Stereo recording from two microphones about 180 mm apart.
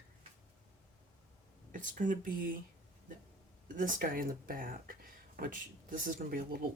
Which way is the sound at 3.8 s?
50° right (ahead or behind).